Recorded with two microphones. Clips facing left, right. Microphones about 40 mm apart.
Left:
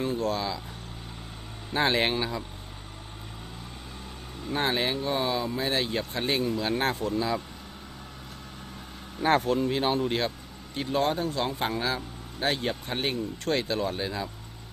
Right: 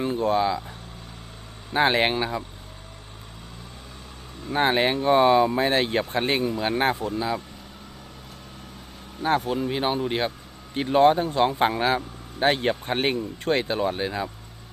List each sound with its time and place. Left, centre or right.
0.0 s speech: right
1.7 s speech: centre
4.5 s speech: right
9.2 s speech: centre
9.5 s speech: centre
10.8 s speech: right